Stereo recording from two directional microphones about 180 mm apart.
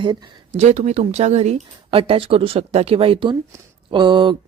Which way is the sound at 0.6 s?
40° right (ahead or behind).